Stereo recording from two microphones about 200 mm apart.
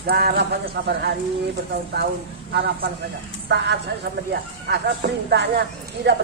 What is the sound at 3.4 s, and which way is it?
Speech, 60° right (ahead or behind).